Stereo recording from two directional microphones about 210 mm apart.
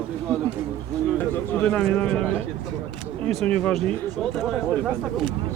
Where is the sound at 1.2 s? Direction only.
10° left (ahead or behind).